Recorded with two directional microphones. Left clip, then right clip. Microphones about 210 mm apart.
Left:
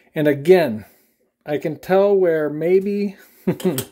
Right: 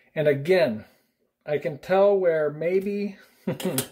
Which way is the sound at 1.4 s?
50° left (ahead or behind).